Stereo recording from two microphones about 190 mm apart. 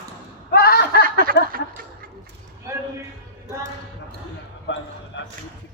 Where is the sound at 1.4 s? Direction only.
60° left (ahead or behind).